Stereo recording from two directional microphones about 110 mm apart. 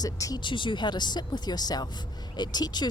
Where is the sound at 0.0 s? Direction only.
35° left (ahead or behind).